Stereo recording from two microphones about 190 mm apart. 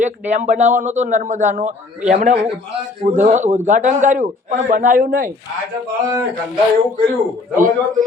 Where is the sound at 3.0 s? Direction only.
40° right (ahead or behind).